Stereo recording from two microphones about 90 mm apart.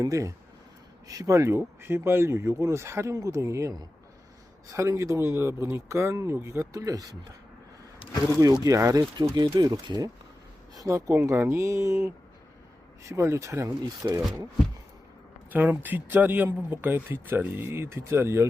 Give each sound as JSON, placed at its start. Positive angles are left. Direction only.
{"t": 0.0, "sound": "speech", "side_deg": -35}
{"t": 8.6, "sound": "speech", "side_deg": -40}
{"t": 9.3, "sound": "speech", "side_deg": -55}
{"t": 10.8, "sound": "speech", "side_deg": -35}
{"t": 15.4, "sound": "speech", "side_deg": -20}